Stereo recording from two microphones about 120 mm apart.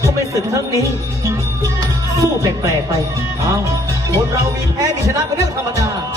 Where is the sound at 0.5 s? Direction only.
25° right (ahead or behind).